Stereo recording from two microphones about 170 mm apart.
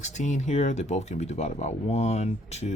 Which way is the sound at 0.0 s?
45° left (ahead or behind).